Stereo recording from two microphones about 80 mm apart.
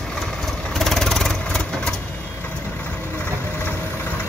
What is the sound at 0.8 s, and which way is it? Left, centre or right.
Vehicle, centre.